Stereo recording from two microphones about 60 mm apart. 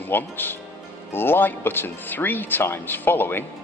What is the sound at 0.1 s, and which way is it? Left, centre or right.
Speech, left.